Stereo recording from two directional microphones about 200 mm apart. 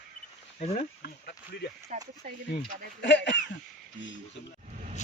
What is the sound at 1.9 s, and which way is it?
Speech, 40° right (ahead or behind).